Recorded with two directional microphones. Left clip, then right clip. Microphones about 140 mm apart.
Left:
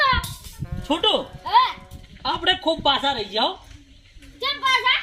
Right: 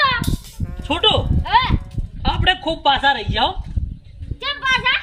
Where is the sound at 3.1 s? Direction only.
35° right (ahead or behind).